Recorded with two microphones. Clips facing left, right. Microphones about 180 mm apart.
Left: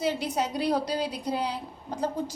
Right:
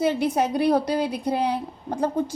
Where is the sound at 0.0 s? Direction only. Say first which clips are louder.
Right 6 dB; 55° right (ahead or behind).